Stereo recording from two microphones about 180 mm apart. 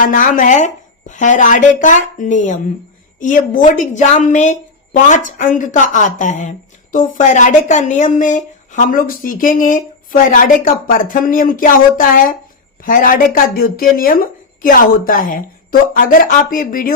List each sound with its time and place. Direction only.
0.0 s speech: 50° left (ahead or behind)